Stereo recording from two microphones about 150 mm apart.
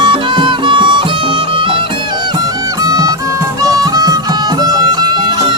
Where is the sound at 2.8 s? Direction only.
25° right (ahead or behind).